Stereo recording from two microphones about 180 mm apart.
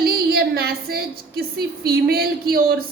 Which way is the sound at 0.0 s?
60° right (ahead or behind).